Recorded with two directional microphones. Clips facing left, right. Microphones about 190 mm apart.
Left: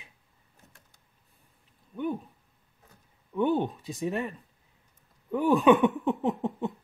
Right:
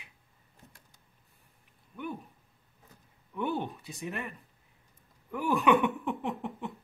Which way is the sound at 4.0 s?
30° left (ahead or behind).